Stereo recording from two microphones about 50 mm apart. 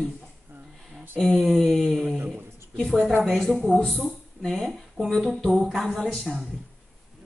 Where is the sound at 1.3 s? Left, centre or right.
Centre.